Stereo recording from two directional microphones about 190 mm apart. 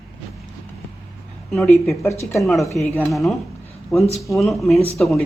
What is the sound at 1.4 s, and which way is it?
Speech, centre (ahead or behind).